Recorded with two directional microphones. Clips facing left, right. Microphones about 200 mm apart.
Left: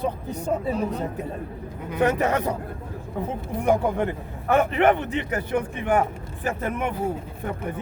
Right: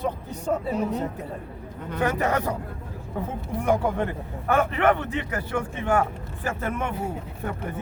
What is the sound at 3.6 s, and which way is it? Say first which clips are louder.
A man's voice: left 2 dB; 20° left (ahead or behind).